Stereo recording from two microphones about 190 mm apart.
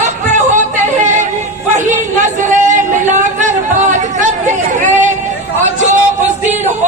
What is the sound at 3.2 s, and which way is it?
Chatter, 40° right (ahead or behind).